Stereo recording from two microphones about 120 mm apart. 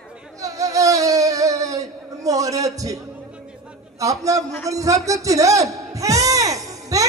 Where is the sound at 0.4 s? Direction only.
30° right (ahead or behind).